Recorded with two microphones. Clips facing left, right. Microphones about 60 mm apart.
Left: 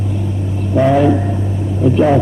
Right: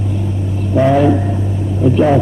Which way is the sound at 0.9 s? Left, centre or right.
Centre.